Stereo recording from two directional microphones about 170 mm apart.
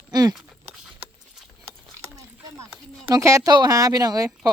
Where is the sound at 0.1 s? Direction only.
20° right (ahead or behind).